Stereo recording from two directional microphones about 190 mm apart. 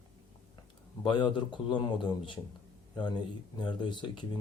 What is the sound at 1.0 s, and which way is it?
Speech, 25° left (ahead or behind).